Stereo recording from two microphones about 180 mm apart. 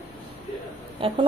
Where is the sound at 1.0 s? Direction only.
30° right (ahead or behind).